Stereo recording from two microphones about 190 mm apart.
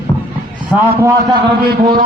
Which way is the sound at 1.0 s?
25° right (ahead or behind).